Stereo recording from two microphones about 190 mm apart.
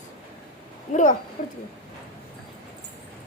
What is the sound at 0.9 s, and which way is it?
Speech, 40° left (ahead or behind).